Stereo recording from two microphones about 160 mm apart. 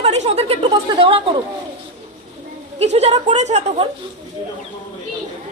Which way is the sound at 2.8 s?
45° right (ahead or behind).